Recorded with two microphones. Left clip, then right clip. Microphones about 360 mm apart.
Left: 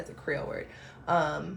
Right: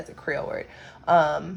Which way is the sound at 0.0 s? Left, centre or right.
Right.